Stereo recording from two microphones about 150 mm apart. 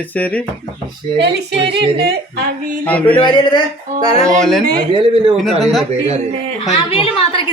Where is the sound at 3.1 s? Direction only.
30° left (ahead or behind).